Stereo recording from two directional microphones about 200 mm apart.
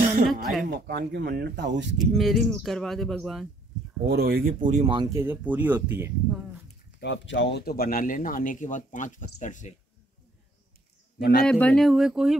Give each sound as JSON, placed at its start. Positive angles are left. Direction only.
{"t": 0.3, "sound": "speech", "side_deg": 0}
{"t": 0.7, "sound": "speech", "side_deg": -55}
{"t": 2.0, "sound": "speech", "side_deg": 0}
{"t": 4.1, "sound": "speech", "side_deg": -50}
{"t": 4.9, "sound": "speech", "side_deg": -15}
{"t": 7.0, "sound": "speech", "side_deg": 65}
{"t": 11.4, "sound": "speech", "side_deg": 5}